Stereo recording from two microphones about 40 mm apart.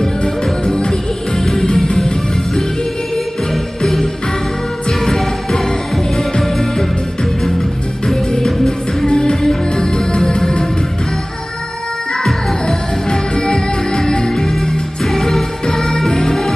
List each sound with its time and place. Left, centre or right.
0.0 s music: centre
3.8 s jingle bell: centre
4.8 s music: centre
8.1 s music: centre
12.6 s music: centre